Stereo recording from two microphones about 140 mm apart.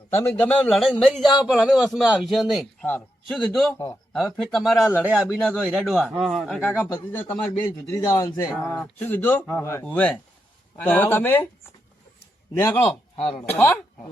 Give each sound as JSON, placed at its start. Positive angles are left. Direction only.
{"t": 0.1, "sound": "speech", "side_deg": 15}
{"t": 1.2, "sound": "a man's voice", "side_deg": 30}
{"t": 1.5, "sound": "a man's voice", "side_deg": -5}
{"t": 6.6, "sound": "speech", "side_deg": 10}
{"t": 12.5, "sound": "speech", "side_deg": 15}
{"t": 13.1, "sound": "speech", "side_deg": 40}
{"t": 13.6, "sound": "speech", "side_deg": 15}